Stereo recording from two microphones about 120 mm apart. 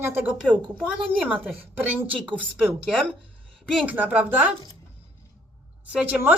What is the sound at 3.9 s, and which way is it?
Speech, 15° right (ahead or behind).